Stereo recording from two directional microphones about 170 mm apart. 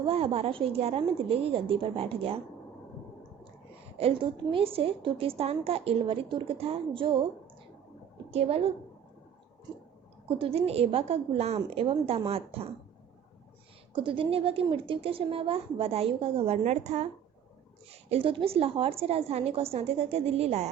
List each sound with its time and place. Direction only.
0.0 s a woman's voice: 35° right (ahead or behind)
3.9 s a woman's voice: 35° right (ahead or behind)
8.3 s a woman's voice: 35° right (ahead or behind)
10.2 s a woman's voice: 30° right (ahead or behind)
13.9 s a woman's voice: 30° right (ahead or behind)
18.1 s a woman's voice: 30° right (ahead or behind)